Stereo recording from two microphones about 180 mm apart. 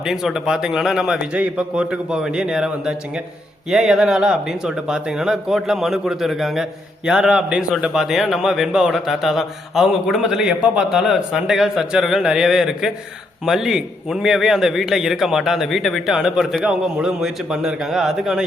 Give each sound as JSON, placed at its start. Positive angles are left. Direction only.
{"t": 0.0, "sound": "speech", "side_deg": -5}